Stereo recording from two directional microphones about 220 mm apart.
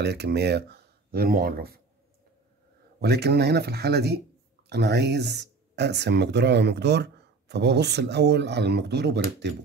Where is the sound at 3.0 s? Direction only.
50° right (ahead or behind).